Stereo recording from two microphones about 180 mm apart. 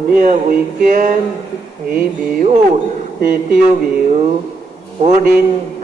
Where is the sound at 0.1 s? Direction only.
50° right (ahead or behind).